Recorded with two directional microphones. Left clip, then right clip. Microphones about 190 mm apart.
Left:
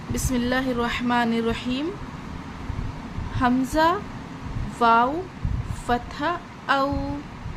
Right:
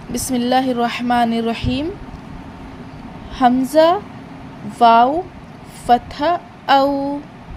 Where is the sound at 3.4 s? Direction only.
20° right (ahead or behind).